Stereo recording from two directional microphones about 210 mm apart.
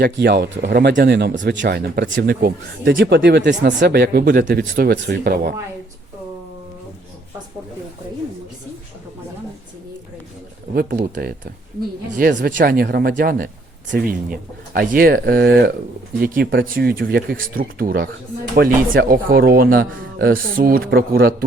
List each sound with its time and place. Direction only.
0.0 s speech: 50° right (ahead or behind)
10.8 s speech: 45° right (ahead or behind)